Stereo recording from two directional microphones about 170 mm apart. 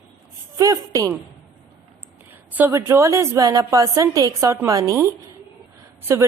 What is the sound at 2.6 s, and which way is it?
A woman's voice, 15° right (ahead or behind).